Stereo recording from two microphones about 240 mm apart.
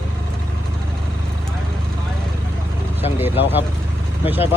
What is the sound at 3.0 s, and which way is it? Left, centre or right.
Vehicle, centre.